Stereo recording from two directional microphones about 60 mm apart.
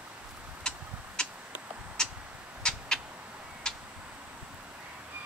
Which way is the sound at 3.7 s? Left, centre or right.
Centre.